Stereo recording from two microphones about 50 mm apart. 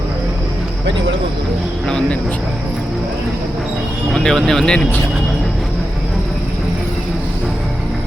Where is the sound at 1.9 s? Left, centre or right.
Centre.